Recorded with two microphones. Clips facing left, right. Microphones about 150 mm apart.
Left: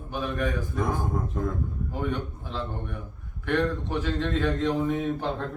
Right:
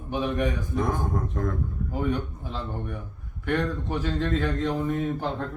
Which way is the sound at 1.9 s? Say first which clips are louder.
Right 4 dB; 5° right (ahead or behind).